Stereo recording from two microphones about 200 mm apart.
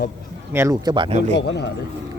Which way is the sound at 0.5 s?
15° right (ahead or behind).